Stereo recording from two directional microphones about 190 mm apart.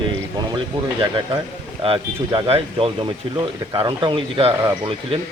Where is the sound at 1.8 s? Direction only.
25° right (ahead or behind).